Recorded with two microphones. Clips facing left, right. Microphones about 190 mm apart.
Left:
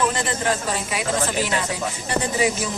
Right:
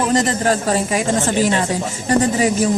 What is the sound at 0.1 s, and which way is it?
A man's voice, 40° right (ahead or behind).